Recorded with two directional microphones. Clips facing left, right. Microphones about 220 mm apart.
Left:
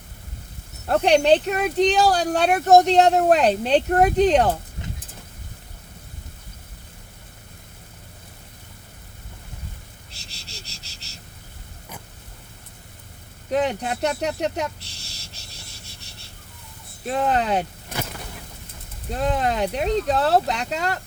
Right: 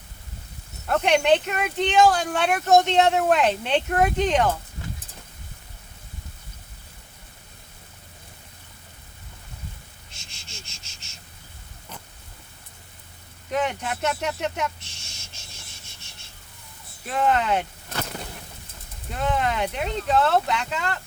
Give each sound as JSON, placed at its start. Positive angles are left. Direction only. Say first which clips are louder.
{"t": 0.9, "sound": "speech", "louder": "left 3 dB", "side_deg": 35}
{"t": 10.1, "sound": "insect", "louder": "left 3 dB", "side_deg": 35}
{"t": 13.5, "sound": "a sound", "louder": "left 4 dB", "side_deg": 35}
{"t": 17.1, "sound": "speech", "louder": "left 1 dB", "side_deg": 35}
{"t": 19.1, "sound": "speech", "louder": "left 2 dB", "side_deg": 35}